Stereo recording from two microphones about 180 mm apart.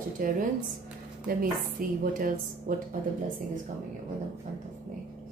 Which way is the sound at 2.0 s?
50° right (ahead or behind).